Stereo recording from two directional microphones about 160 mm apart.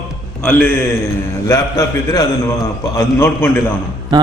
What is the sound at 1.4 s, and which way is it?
A man's voice, 20° left (ahead or behind).